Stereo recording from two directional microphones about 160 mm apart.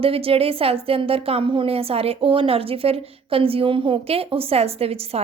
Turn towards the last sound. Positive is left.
turn(degrees=-40)  # may be behind; listen again after turning